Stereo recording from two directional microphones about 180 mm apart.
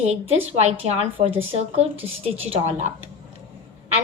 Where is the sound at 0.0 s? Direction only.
40° right (ahead or behind).